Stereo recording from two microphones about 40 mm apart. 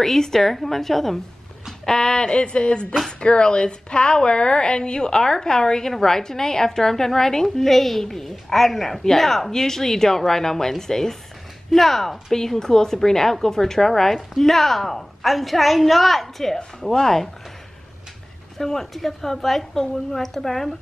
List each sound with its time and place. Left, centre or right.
0.0 s a woman's voice: centre
1.9 s a woman's voice: centre
18.6 s a woman's voice: centre